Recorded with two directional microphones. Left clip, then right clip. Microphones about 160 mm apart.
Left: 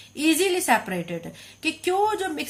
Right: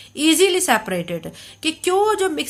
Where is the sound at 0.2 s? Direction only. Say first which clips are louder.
Right 6 dB; 35° right (ahead or behind).